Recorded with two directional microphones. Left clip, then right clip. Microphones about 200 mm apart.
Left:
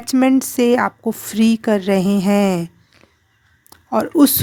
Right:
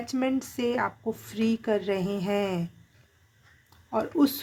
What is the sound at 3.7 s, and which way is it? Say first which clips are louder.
Speech: left 10 dB; 55° left (ahead or behind).